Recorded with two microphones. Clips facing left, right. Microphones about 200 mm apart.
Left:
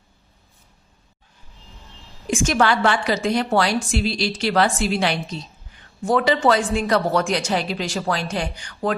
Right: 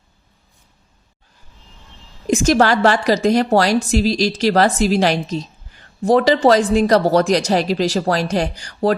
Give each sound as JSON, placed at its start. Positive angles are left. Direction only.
{"t": 2.2, "sound": "a woman's voice", "side_deg": -40}